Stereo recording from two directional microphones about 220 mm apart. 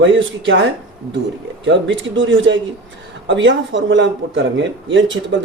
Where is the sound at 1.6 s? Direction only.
60° right (ahead or behind).